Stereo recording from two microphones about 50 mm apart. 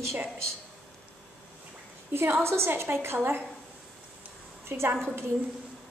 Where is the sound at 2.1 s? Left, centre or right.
Right.